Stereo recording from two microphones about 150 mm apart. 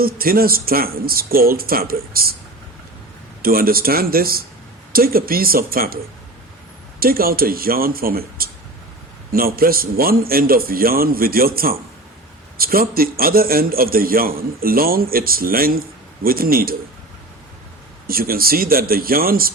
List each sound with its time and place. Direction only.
0.0 s a man's voice: 80° right
3.4 s a man's voice: 80° right
7.0 s a man's voice: 80° right
18.1 s speech: 80° right